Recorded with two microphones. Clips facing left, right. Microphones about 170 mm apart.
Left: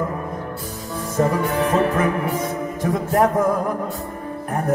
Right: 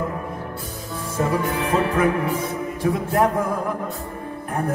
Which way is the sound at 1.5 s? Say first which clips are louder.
Left 3 dB; 50° left (ahead or behind).